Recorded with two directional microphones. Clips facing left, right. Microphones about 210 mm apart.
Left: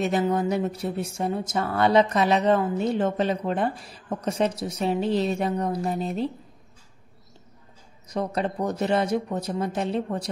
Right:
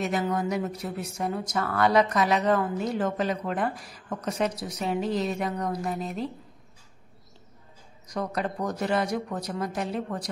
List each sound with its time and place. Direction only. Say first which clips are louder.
0.0 s speech: left 4 dB; 30° left (ahead or behind)
8.1 s speech: left 3 dB; 25° left (ahead or behind)